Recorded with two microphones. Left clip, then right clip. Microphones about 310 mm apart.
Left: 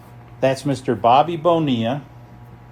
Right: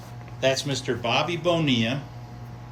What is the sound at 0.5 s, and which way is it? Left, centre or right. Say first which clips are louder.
Speech: left 5 dB; centre.